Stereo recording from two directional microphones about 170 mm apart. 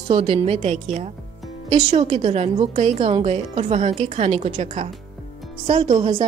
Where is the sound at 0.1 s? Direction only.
35° right (ahead or behind).